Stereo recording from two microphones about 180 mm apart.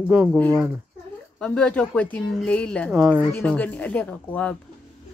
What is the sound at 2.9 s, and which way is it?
Speech, 5° right (ahead or behind).